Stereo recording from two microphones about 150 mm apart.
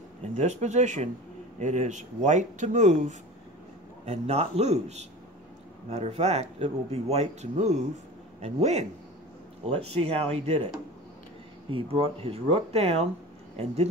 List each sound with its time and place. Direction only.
0.3 s speech: 50° right (ahead or behind)
11.7 s speech: 35° right (ahead or behind)